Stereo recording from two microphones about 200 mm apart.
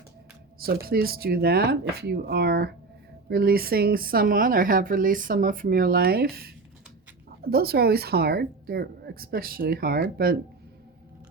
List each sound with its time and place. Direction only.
0.6 s speech: 50° right (ahead or behind)